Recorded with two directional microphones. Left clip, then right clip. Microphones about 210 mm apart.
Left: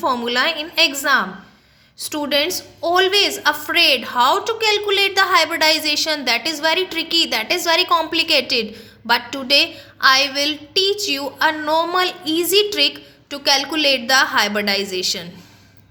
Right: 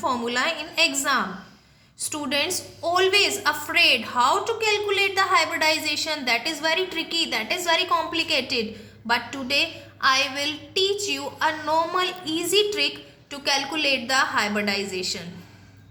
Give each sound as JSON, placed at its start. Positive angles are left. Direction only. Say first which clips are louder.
{"t": 0.0, "sound": "a woman's voice", "louder": "left 6 dB", "side_deg": 45}